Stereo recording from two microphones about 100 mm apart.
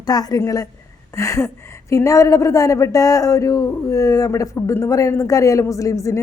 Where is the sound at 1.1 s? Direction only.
25° left (ahead or behind).